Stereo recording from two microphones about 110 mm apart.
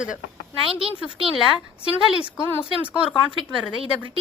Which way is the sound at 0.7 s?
55° right (ahead or behind).